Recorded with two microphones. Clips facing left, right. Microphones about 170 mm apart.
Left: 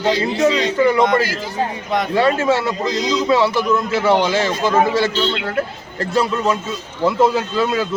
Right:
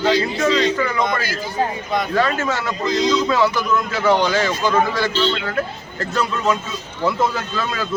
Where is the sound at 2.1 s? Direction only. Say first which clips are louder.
Left 6 dB; 30° left (ahead or behind).